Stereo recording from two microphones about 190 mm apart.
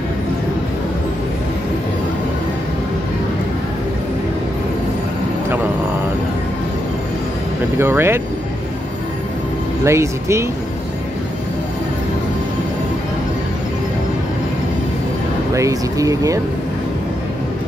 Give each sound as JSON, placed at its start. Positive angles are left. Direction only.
{"t": 7.8, "sound": "speech", "side_deg": -10}
{"t": 9.8, "sound": "speech", "side_deg": -15}
{"t": 15.5, "sound": "speech", "side_deg": -15}